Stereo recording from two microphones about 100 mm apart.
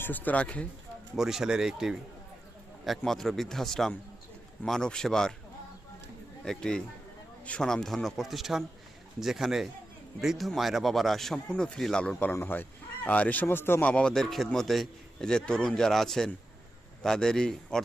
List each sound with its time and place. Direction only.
0.0 s speech: 20° left (ahead or behind)
1.1 s a man's voice: 5° right (ahead or behind)
6.4 s a man's voice: 10° left (ahead or behind)
13.9 s a man's voice: 5° left (ahead or behind)